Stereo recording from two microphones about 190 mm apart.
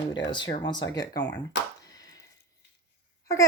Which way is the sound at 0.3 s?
25° left (ahead or behind).